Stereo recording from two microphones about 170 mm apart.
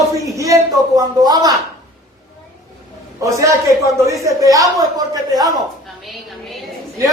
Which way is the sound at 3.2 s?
20° right (ahead or behind).